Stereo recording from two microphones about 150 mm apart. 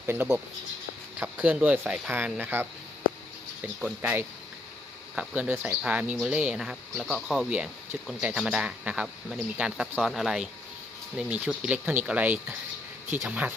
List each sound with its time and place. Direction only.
0.0 s speech: 15° right (ahead or behind)